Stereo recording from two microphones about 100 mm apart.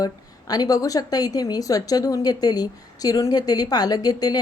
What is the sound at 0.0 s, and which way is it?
A woman's voice, 40° left (ahead or behind).